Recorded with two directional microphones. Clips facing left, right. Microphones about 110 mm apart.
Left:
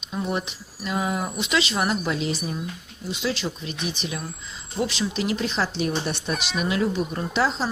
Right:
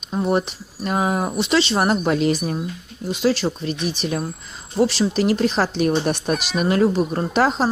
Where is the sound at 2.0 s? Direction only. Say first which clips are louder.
Right 7 dB; 50° right (ahead or behind).